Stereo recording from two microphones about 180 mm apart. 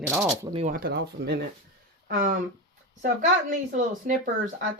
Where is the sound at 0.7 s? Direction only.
60° right (ahead or behind).